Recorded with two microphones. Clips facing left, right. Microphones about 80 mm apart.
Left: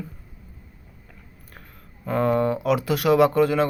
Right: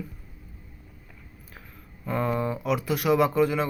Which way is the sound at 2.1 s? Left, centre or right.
Left.